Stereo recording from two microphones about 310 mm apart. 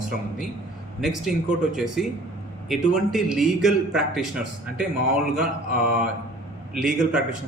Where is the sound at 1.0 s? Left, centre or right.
Centre.